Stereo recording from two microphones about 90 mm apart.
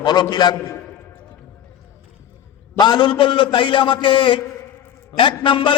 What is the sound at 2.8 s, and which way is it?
A man's voice, 55° left (ahead or behind).